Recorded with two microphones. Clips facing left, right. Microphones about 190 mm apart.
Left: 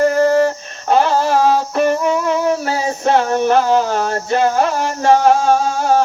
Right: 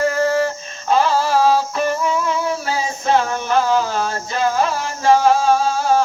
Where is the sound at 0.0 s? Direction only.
45° left (ahead or behind).